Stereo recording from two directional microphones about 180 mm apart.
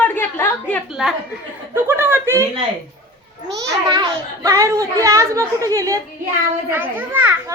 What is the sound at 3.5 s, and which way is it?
A child's voice, 20° right (ahead or behind).